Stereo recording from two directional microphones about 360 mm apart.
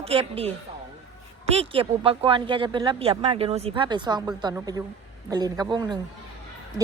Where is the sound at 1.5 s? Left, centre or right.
Centre.